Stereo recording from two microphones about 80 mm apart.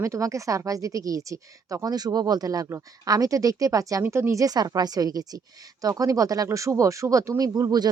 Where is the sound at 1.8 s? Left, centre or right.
Right.